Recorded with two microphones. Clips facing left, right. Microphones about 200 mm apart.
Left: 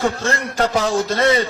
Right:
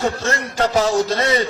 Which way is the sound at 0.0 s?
55° left (ahead or behind).